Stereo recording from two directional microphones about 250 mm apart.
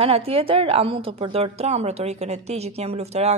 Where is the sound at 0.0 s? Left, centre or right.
Right.